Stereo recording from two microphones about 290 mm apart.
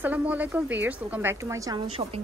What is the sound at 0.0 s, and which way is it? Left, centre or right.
Speech, centre.